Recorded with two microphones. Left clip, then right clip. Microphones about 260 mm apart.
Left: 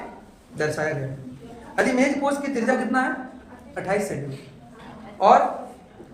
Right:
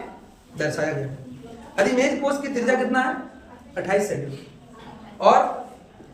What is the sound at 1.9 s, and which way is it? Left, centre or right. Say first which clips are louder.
Speech: right 1 dB; centre.